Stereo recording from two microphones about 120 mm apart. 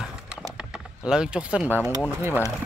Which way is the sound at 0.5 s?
5° right (ahead or behind).